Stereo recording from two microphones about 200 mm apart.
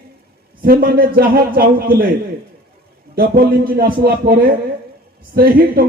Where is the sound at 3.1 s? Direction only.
45° right (ahead or behind).